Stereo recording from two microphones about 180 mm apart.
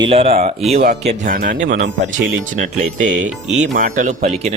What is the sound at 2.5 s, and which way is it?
Speech, 45° right (ahead or behind).